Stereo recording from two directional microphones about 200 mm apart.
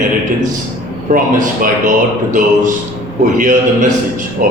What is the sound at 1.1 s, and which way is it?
A man's voice, 45° right (ahead or behind).